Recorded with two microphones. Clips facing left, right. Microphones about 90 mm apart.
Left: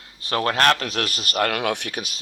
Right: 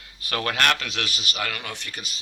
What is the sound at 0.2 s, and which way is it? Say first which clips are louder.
Speech: left 4 dB; 30° left (ahead or behind).